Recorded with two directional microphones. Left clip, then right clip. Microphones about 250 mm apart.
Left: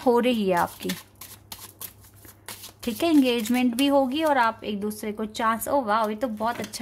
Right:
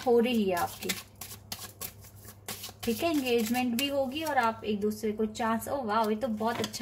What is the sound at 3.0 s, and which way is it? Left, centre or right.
A woman's voice, left.